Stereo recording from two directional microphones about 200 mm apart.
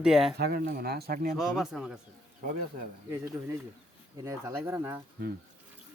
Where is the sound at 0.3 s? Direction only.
55° right (ahead or behind).